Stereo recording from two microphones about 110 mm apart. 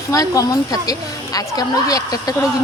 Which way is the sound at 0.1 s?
30° left (ahead or behind).